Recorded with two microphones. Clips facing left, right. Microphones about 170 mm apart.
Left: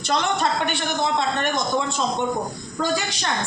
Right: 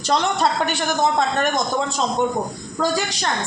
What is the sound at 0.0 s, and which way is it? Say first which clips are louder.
A man's voice: right 3 dB; 35° right (ahead or behind).